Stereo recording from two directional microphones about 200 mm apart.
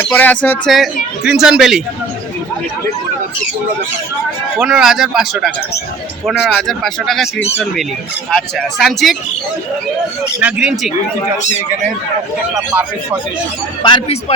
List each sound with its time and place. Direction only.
0.0 s speech: 10° left (ahead or behind)
4.5 s speech: centre (ahead or behind)
10.4 s speech: 5° right (ahead or behind)
13.8 s speech: 25° left (ahead or behind)